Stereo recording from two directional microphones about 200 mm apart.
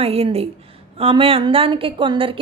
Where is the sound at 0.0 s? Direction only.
30° right (ahead or behind).